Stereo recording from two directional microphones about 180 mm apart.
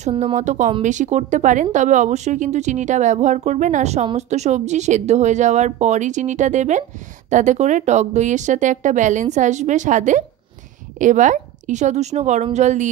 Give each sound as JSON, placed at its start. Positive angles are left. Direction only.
{"t": 0.0, "sound": "speech", "side_deg": -35}